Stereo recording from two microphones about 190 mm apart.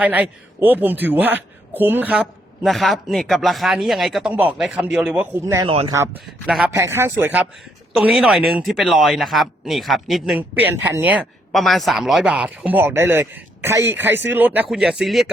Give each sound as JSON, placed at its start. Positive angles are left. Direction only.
{"t": 0.0, "sound": "a man's voice", "side_deg": -10}
{"t": 5.6, "sound": "speech", "side_deg": -30}
{"t": 6.0, "sound": "a man's voice", "side_deg": -5}